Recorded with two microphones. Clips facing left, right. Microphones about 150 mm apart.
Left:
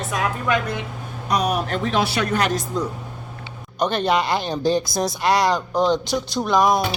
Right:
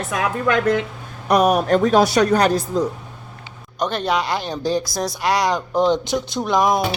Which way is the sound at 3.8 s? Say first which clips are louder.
Left 1 dB; centre (ahead or behind).